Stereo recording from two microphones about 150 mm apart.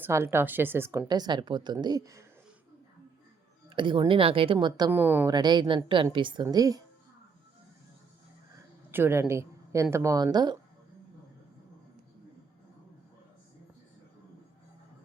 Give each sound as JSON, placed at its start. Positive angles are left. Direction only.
{"t": 0.0, "sound": "speech", "side_deg": -15}
{"t": 3.7, "sound": "speech", "side_deg": -35}
{"t": 4.9, "sound": "speech", "side_deg": -15}
{"t": 5.3, "sound": "speech", "side_deg": -30}
{"t": 8.9, "sound": "speech", "side_deg": -15}